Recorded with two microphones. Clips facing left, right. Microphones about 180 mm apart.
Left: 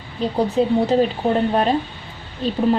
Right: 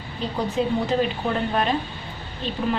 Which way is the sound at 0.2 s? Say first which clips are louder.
Left 6 dB; 35° left (ahead or behind).